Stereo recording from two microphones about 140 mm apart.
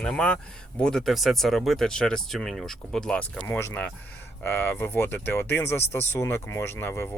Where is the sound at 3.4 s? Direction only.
20° left (ahead or behind).